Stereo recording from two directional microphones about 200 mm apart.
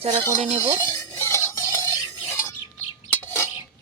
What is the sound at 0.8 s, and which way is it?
Music, 10° left (ahead or behind).